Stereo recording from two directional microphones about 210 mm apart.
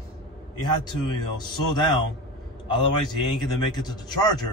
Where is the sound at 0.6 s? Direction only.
20° left (ahead or behind).